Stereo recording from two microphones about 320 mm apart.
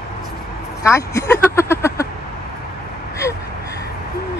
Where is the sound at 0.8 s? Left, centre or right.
Centre.